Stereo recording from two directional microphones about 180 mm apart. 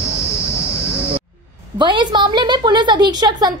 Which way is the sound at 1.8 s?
25° right (ahead or behind).